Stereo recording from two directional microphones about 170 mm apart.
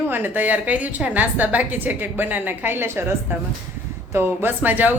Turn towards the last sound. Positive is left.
turn(degrees=-10)  # may be behind; listen again after turning